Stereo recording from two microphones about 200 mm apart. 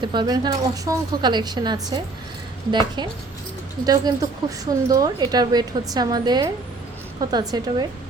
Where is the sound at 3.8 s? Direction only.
20° right (ahead or behind).